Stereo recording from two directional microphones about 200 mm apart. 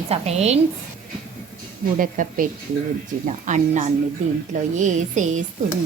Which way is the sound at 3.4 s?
35° right (ahead or behind).